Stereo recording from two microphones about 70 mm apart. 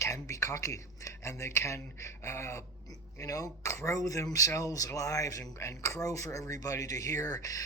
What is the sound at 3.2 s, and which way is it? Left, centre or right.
Speech, left.